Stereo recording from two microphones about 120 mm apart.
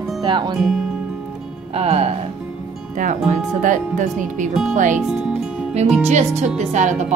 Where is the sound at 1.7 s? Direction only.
60° right (ahead or behind).